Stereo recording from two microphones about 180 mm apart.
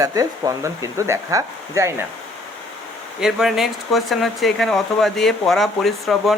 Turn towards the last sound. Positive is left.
turn(degrees=0)  # may be behind; listen again after turning